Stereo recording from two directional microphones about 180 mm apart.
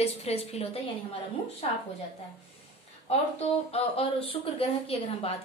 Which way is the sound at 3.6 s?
35° left (ahead or behind).